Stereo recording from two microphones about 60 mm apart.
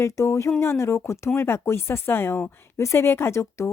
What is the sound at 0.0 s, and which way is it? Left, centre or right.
Speech, left.